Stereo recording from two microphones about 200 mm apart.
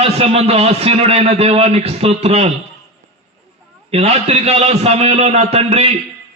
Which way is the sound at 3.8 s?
30° right (ahead or behind).